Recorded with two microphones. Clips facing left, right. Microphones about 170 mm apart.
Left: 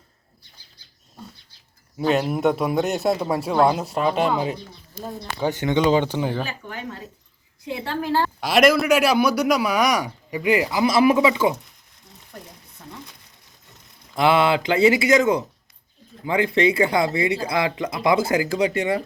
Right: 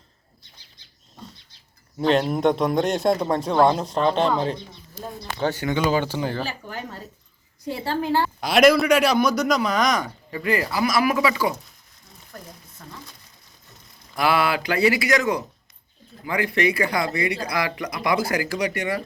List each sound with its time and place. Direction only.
2.0 s speech: 5° left (ahead or behind)
5.4 s speech: 20° left (ahead or behind)
7.6 s a woman's voice: 40° right (ahead or behind)
8.0 s a woman's voice: 15° right (ahead or behind)
8.4 s a man's voice: centre (ahead or behind); by 11.5 s 20° left (ahead or behind)
14.2 s speech: 25° left (ahead or behind)